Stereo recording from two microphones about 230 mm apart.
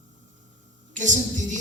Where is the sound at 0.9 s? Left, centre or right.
Right.